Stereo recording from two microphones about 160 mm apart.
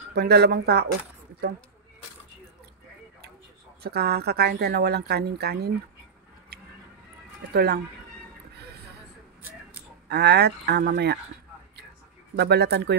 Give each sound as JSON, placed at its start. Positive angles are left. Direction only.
{"t": 0.1, "sound": "speech", "side_deg": -90}
{"t": 3.8, "sound": "speech", "side_deg": -90}
{"t": 6.5, "sound": "music", "side_deg": -80}
{"t": 7.5, "sound": "speech", "side_deg": -80}
{"t": 10.0, "sound": "speech", "side_deg": -90}
{"t": 12.4, "sound": "speech", "side_deg": -90}